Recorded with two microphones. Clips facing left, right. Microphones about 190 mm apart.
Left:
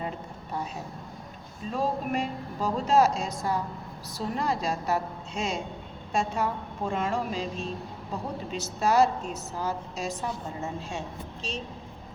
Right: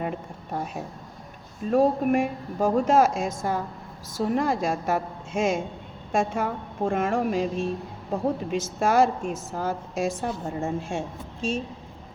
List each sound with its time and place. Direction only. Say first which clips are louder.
1.7 s a woman's voice: right 8 dB; 55° right (ahead or behind)